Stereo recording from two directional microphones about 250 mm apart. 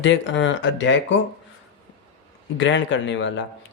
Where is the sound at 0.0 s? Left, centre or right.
Left.